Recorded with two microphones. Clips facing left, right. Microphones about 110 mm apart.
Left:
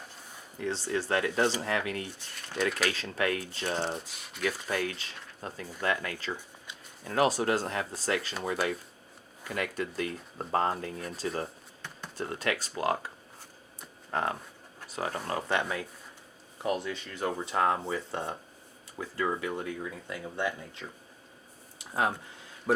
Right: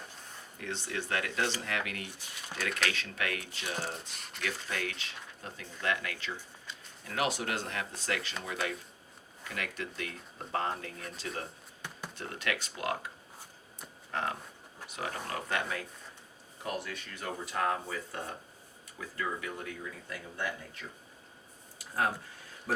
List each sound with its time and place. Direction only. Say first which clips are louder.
0.6 s speech: left 6 dB; 35° left (ahead or behind)
3.9 s speech: left 4 dB; centre (ahead or behind)
4.4 s speech: left 6 dB; 35° left (ahead or behind)
14.1 s speech: left 4 dB; 35° left (ahead or behind)
21.8 s a sound: left 2 dB; 20° left (ahead or behind)